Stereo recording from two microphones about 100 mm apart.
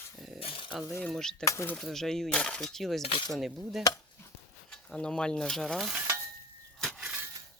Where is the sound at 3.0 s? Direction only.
60° left (ahead or behind).